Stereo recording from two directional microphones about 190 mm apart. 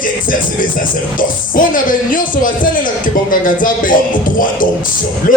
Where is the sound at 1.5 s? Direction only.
45° left (ahead or behind).